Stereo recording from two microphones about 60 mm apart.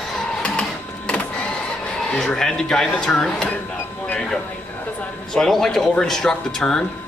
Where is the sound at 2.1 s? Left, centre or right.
Centre.